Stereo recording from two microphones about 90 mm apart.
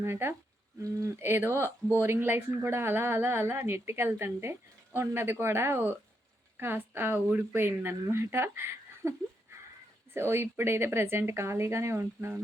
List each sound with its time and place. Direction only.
0.0 s speech: 25° right (ahead or behind)